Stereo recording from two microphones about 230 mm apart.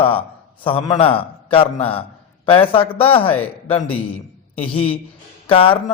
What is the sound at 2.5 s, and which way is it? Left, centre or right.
Speech, left.